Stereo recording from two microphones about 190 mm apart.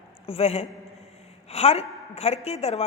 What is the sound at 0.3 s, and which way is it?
A woman's voice, 30° left (ahead or behind).